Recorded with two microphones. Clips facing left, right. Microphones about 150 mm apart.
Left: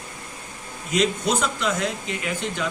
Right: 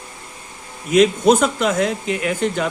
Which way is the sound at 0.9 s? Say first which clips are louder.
Right 9 dB; 55° right (ahead or behind).